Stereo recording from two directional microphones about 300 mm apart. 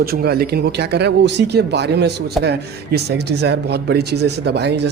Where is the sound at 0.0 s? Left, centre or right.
Right.